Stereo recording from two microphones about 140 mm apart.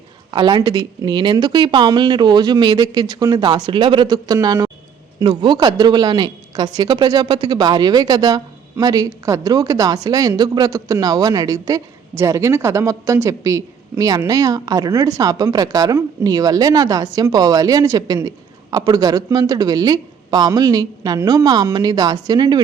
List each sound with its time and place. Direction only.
0.3 s a woman's voice: 30° right (ahead or behind)